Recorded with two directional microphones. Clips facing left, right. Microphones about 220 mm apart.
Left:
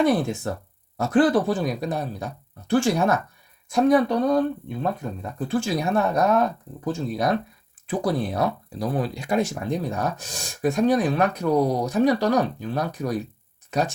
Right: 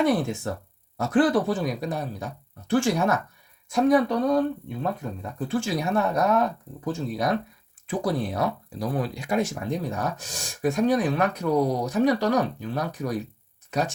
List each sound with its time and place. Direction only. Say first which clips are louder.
0.5 s speech: left 2 dB; 35° left (ahead or behind)